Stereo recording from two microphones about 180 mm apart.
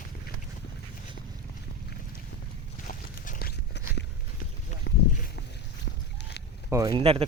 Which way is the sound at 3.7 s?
70° left (ahead or behind).